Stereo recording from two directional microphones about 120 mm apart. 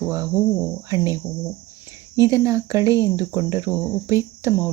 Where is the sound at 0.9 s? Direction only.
30° right (ahead or behind).